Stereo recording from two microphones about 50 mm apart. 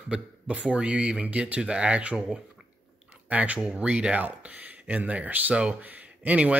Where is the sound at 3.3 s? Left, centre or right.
Right.